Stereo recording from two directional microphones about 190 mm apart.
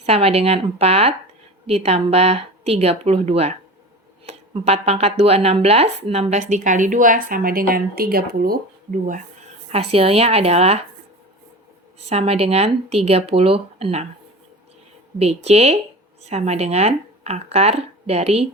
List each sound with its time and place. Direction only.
0.0 s a woman's voice: 30° right (ahead or behind)
9.7 s speech: 30° right (ahead or behind)
11.9 s speech: 35° right (ahead or behind)
15.4 s speech: 35° right (ahead or behind)